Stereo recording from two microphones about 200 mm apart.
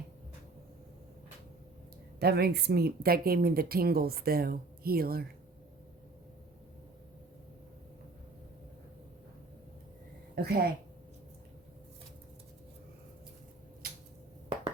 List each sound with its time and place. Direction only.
2.1 s speech: 50° right (ahead or behind)
10.3 s a woman's voice: 50° right (ahead or behind)